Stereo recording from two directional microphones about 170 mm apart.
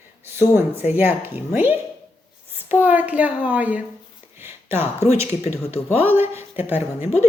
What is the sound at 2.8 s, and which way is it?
A woman's voice, 10° right (ahead or behind).